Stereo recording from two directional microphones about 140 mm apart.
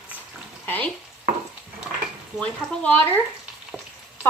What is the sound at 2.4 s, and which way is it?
Speech, 10° left (ahead or behind).